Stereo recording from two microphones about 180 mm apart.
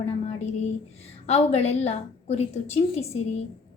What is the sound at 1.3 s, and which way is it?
A woman's voice, 35° left (ahead or behind).